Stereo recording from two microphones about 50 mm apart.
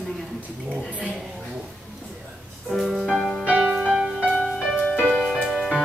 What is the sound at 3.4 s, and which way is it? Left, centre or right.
Music, right.